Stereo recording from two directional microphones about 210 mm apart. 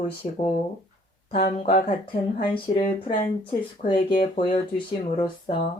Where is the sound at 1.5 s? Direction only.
30° left (ahead or behind).